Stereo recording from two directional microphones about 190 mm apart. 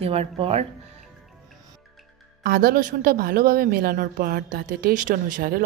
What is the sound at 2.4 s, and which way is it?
A woman's voice, 50° right (ahead or behind).